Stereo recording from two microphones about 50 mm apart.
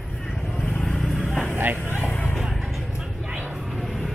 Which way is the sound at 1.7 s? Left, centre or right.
Left.